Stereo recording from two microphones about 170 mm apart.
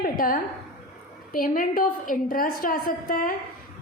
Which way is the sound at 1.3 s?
60° left (ahead or behind).